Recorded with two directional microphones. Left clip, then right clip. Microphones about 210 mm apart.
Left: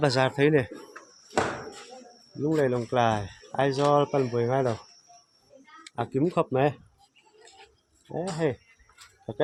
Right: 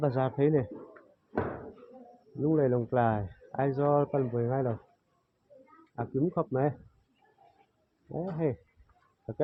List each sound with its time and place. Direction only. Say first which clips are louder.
0.0 s speech: left 5 dB; 15° left (ahead or behind)
1.3 s door: left 7 dB; 50° left (ahead or behind)
2.4 s speech: left 2 dB; 5° left (ahead or behind); by 4.8 s 20° left (ahead or behind)
6.0 s speech: left 5 dB; 25° left (ahead or behind)
8.1 s speech: left 4 dB; 15° left (ahead or behind)